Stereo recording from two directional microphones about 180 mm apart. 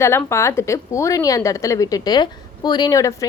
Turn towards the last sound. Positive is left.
turn(degrees=20)  # may be behind; listen again after turning